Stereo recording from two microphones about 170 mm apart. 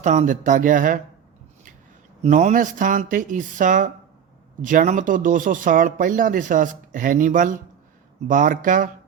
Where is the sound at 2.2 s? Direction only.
45° right (ahead or behind).